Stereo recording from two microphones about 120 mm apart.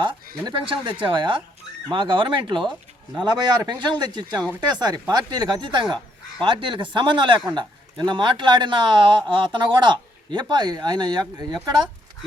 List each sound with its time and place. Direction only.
0.4 s speech: 45° right (ahead or behind)